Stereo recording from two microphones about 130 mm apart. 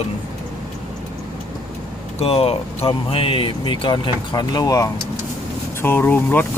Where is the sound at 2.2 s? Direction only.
50° left (ahead or behind); by 4.9 s 30° left (ahead or behind).